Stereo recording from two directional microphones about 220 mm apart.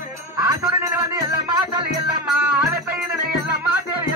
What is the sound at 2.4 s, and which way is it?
Music, 5° right (ahead or behind).